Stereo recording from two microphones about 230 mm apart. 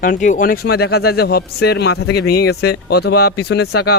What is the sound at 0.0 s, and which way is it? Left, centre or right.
Speech, left.